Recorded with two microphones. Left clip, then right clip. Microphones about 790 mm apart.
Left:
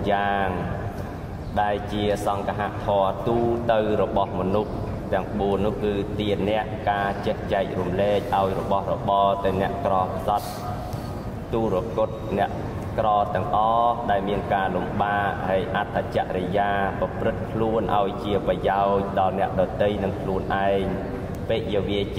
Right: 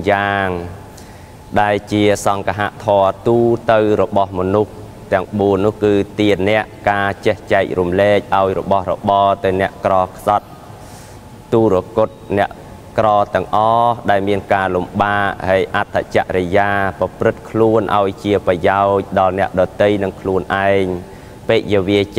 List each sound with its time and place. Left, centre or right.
0.0 s speech: right
1.5 s speech: right
11.5 s speech: right